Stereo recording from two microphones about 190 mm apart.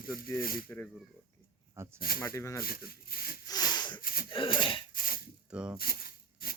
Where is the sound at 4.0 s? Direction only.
50° left (ahead or behind).